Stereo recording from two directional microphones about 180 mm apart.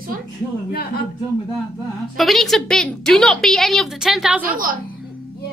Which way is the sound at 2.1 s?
Centre (ahead or behind).